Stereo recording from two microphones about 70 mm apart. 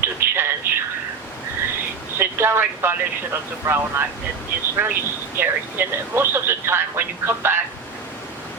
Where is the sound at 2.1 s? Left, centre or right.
Right.